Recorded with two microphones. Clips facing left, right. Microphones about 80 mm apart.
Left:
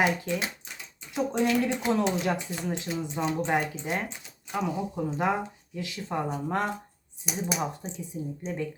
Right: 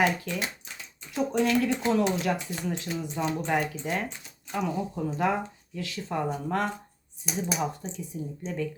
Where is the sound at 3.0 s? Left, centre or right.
Centre.